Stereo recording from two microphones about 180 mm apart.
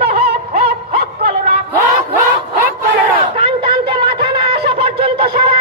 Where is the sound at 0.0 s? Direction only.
60° right (ahead or behind).